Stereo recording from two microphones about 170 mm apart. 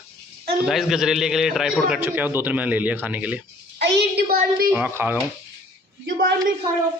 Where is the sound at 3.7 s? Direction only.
90° right; by 4.7 s 65° right (ahead or behind).